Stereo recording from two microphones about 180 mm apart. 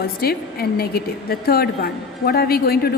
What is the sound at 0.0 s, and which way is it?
A woman's voice, 60° left (ahead or behind).